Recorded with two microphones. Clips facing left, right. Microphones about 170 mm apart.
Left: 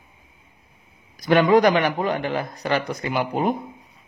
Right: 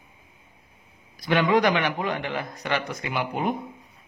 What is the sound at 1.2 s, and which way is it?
A man's voice, 45° left (ahead or behind).